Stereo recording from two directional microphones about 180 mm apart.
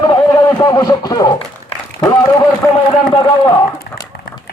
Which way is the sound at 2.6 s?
10° left (ahead or behind).